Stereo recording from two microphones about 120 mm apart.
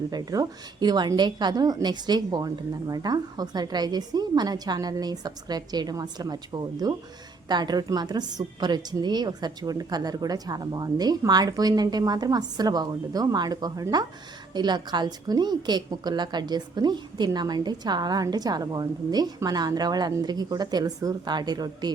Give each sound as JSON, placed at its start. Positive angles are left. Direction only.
{"t": 0.1, "sound": "a woman's voice", "side_deg": -30}